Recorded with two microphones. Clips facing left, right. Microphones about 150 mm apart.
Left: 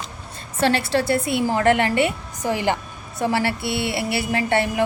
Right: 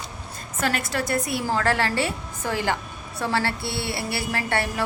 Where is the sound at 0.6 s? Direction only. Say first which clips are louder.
Left 6 dB; 30° left (ahead or behind).